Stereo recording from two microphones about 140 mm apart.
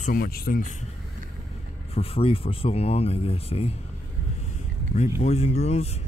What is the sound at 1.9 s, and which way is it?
Speech, 45° left (ahead or behind).